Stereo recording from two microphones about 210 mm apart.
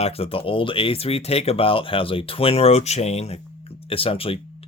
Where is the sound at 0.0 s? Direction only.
30° left (ahead or behind).